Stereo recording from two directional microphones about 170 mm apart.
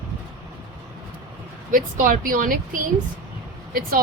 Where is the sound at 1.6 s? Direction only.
50° right (ahead or behind).